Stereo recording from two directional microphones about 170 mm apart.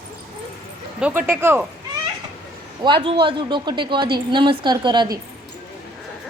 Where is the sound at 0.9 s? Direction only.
10° right (ahead or behind).